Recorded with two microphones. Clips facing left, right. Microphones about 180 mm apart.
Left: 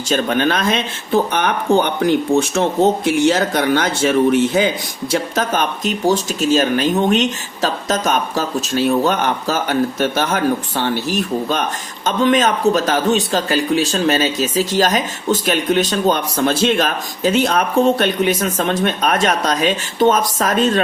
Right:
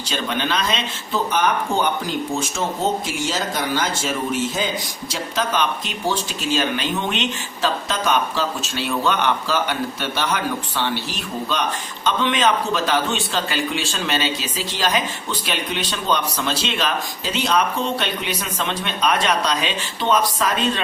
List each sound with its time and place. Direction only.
0.1 s speech: 50° left (ahead or behind)
5.1 s a man's voice: 50° left (ahead or behind)